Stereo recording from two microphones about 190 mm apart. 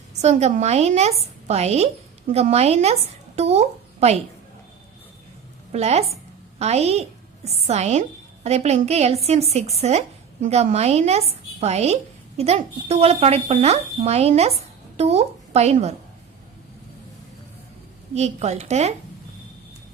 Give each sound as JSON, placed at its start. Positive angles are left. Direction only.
{"t": 0.1, "sound": "speech", "side_deg": -35}
{"t": 5.7, "sound": "speech", "side_deg": -35}
{"t": 18.1, "sound": "speech", "side_deg": -35}